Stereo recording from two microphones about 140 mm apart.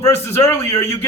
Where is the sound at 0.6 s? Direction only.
45° left (ahead or behind).